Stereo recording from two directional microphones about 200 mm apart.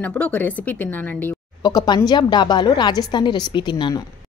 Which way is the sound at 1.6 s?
20° left (ahead or behind).